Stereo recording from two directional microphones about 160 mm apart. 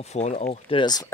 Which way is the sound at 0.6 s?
30° left (ahead or behind).